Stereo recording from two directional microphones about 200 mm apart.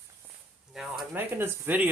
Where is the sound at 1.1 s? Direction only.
10° right (ahead or behind).